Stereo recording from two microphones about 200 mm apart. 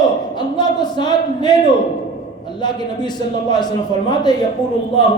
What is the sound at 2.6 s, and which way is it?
A man's voice, 20° left (ahead or behind).